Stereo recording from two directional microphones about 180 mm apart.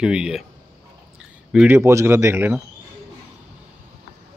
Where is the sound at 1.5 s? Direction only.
10° right (ahead or behind).